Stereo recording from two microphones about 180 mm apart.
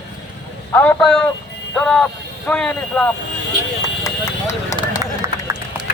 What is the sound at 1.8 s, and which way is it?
Speech, 5° left (ahead or behind).